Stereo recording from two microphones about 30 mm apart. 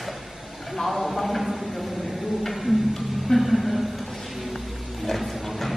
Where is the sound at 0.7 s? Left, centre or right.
Centre.